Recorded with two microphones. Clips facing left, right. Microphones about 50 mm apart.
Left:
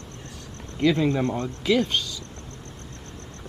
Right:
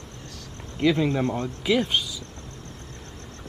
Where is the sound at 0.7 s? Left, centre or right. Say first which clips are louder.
Left 1 dB; centre.